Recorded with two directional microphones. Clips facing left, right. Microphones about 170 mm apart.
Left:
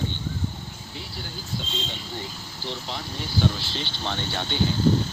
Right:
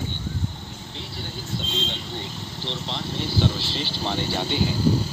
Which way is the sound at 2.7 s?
Centre (ahead or behind).